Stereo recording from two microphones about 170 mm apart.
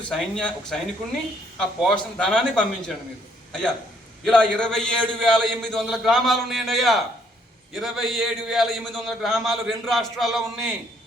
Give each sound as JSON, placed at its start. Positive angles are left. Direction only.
{"t": 0.1, "sound": "a man's voice", "side_deg": 5}
{"t": 4.3, "sound": "a man's voice", "side_deg": 5}